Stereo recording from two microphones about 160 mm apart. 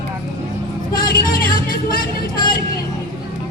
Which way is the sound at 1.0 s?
65° left (ahead or behind).